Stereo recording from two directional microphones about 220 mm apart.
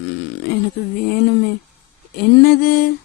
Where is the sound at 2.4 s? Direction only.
45° left (ahead or behind).